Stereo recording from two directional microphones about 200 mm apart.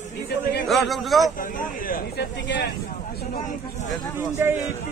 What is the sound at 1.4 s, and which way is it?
Speech, 45° left (ahead or behind).